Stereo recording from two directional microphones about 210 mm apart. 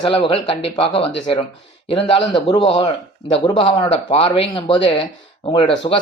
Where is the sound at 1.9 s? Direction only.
25° left (ahead or behind).